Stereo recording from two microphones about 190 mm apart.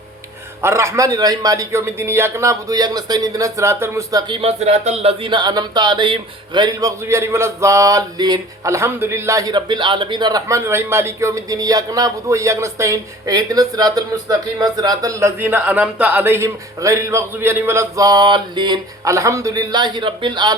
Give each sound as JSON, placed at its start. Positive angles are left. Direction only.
{"t": 0.6, "sound": "a man's voice", "side_deg": -15}
{"t": 4.3, "sound": "speech", "side_deg": -30}